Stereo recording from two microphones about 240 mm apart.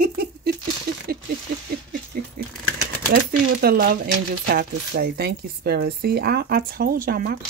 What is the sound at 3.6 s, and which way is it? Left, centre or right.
Speech, right.